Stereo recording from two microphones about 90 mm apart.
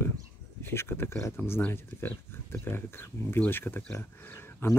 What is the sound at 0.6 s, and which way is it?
Speech, 25° left (ahead or behind).